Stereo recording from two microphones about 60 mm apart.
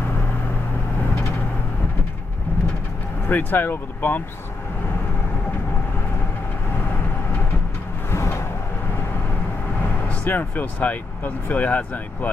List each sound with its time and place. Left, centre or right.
3.3 s speech: left
8.1 s a sound: left
10.2 s speech: left